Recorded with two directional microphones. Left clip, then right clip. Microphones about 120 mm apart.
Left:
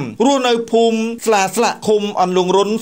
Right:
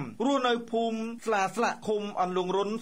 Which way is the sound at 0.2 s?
20° left (ahead or behind).